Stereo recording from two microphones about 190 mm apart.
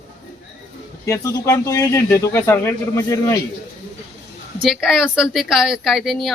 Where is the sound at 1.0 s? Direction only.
15° left (ahead or behind).